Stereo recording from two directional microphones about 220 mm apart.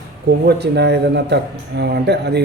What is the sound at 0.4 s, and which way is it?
Speech, 50° right (ahead or behind).